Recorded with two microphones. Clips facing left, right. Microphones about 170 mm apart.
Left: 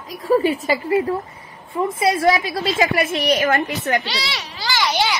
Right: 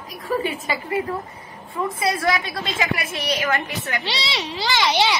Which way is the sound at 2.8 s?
40° left (ahead or behind).